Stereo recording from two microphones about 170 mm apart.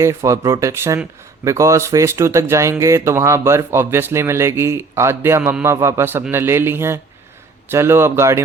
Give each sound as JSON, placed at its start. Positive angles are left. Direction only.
{"t": 0.0, "sound": "speech", "side_deg": -15}